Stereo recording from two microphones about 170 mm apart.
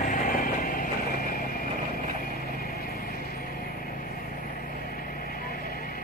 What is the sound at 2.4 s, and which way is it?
Vehicle, 65° left (ahead or behind).